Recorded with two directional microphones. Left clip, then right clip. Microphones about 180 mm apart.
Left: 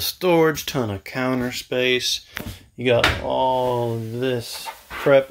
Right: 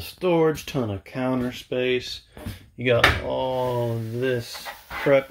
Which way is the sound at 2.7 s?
25° left (ahead or behind).